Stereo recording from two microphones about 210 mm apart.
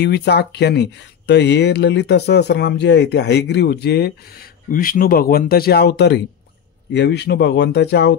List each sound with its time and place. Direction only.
0.0 s speech: 55° left (ahead or behind)